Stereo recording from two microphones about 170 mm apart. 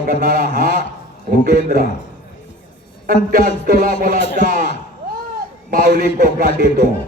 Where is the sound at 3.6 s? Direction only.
55° right (ahead or behind).